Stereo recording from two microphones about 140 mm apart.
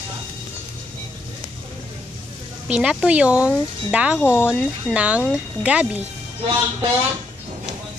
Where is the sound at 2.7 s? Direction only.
10° right (ahead or behind).